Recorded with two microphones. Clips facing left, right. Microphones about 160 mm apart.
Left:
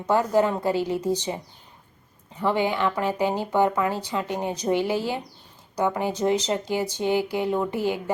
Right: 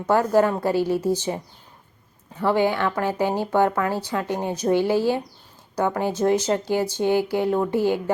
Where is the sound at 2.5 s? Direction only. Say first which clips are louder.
Right 3 dB; 15° left (ahead or behind).